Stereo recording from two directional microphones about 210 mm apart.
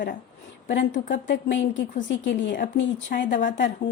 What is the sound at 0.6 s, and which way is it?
A woman's voice, 60° left (ahead or behind).